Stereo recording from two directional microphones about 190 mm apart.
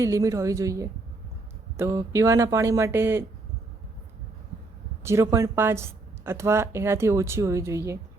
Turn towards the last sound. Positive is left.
turn(degrees=-15)  # may be behind; listen again after turning